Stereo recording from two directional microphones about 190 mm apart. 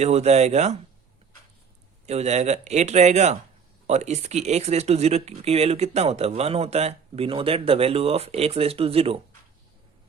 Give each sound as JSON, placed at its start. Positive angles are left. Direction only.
{"t": 0.0, "sound": "speech", "side_deg": -35}
{"t": 2.0, "sound": "speech", "side_deg": -35}